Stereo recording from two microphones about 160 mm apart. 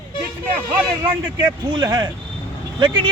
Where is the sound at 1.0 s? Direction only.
20° right (ahead or behind).